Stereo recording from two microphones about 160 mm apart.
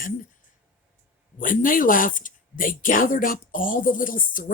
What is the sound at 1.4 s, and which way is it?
Speech, 60° left (ahead or behind).